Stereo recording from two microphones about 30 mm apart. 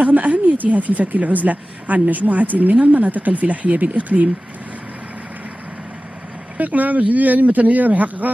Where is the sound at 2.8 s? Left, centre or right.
Right.